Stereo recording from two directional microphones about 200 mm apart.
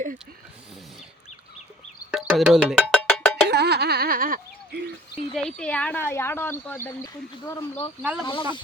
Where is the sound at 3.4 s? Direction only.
55° right (ahead or behind).